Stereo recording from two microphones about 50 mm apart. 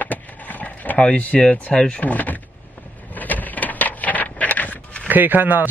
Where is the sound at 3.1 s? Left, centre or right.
Left.